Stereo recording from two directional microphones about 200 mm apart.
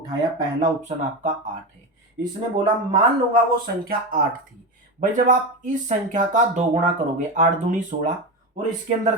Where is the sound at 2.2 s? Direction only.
25° right (ahead or behind).